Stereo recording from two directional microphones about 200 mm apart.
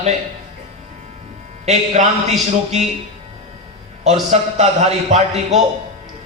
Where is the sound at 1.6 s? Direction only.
35° right (ahead or behind).